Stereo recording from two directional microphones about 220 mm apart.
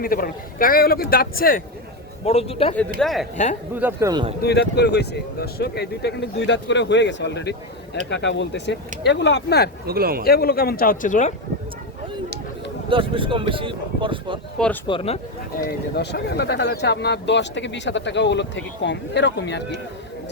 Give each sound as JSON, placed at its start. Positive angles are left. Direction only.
{"t": 0.0, "sound": "speech", "side_deg": 40}
{"t": 2.2, "sound": "a man's voice", "side_deg": 25}
{"t": 3.0, "sound": "speech", "side_deg": 0}
{"t": 3.3, "sound": "speech", "side_deg": 35}
{"t": 3.8, "sound": "speech", "side_deg": -10}
{"t": 4.4, "sound": "speech", "side_deg": 50}
{"t": 9.8, "sound": "speech", "side_deg": -45}
{"t": 10.2, "sound": "speech", "side_deg": 45}
{"t": 12.9, "sound": "speech", "side_deg": -25}
{"t": 14.8, "sound": "a man's voice", "side_deg": 25}
{"t": 15.5, "sound": "speech", "side_deg": 50}